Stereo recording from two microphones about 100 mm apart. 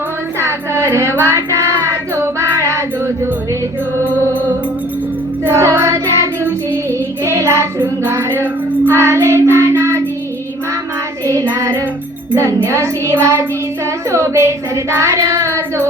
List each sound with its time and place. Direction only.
0.3 s child singing: 25° right (ahead or behind)
5.5 s music: 30° right (ahead or behind)
7.3 s child singing: 30° right (ahead or behind)
11.3 s child singing: 30° right (ahead or behind)